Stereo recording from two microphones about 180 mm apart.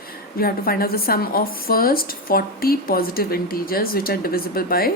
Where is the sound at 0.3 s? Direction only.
55° left (ahead or behind).